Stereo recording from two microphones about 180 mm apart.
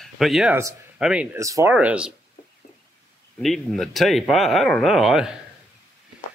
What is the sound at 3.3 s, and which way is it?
Speech, centre (ahead or behind).